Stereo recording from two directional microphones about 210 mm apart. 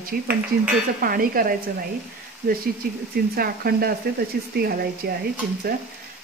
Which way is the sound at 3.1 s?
45° right (ahead or behind).